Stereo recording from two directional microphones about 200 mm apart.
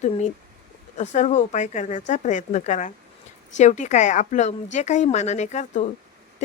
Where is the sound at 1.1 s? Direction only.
35° left (ahead or behind).